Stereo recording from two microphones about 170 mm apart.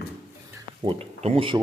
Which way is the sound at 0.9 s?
35° right (ahead or behind).